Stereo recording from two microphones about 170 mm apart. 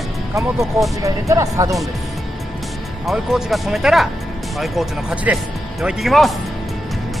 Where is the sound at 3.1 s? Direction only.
Centre (ahead or behind).